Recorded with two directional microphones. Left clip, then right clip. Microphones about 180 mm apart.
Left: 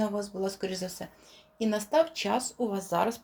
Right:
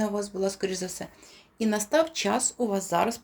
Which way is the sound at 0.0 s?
15° right (ahead or behind).